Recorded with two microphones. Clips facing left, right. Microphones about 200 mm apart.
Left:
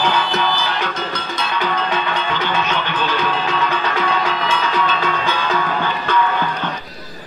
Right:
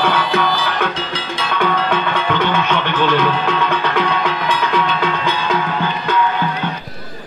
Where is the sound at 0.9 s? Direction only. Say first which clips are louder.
Right 1 dB; 30° right (ahead or behind).